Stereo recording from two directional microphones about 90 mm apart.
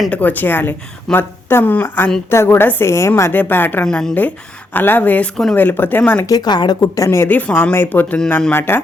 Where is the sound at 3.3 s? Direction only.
20° left (ahead or behind).